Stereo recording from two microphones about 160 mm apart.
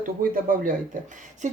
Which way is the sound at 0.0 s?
60° right (ahead or behind).